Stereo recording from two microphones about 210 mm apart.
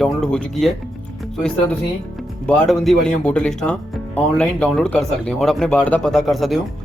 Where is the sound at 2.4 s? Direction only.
5° left (ahead or behind).